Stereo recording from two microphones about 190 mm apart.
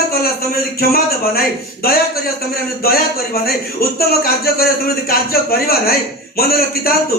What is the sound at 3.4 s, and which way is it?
A man's voice, 55° left (ahead or behind).